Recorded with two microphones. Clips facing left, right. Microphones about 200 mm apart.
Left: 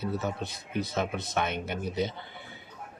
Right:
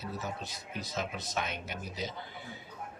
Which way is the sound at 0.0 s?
60° left (ahead or behind).